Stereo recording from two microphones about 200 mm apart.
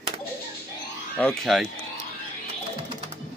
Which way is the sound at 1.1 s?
5° left (ahead or behind).